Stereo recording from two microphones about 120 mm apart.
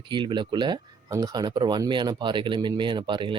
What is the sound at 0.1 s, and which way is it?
Speech, 40° right (ahead or behind).